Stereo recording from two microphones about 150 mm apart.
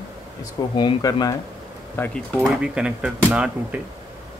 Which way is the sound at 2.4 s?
5° right (ahead or behind).